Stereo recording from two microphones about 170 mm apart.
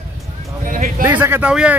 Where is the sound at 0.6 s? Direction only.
50° right (ahead or behind).